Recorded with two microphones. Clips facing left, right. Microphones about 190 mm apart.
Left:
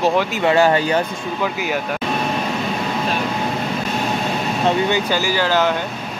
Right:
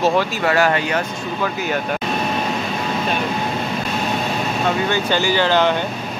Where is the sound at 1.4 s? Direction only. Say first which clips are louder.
Even; 10° left (ahead or behind).